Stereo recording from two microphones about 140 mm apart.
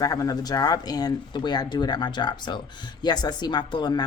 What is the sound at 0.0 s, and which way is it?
A woman's voice, 25° left (ahead or behind).